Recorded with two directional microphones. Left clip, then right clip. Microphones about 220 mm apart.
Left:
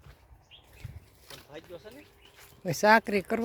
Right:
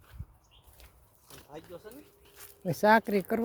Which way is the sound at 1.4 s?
55° right (ahead or behind).